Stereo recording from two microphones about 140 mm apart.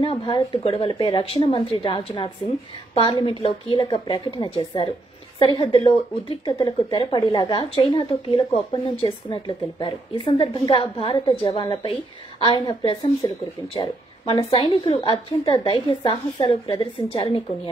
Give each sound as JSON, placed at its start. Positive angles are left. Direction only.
{"t": 0.0, "sound": "a woman's voice", "side_deg": 40}